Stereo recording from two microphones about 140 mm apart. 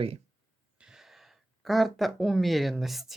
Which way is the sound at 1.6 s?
Centre (ahead or behind).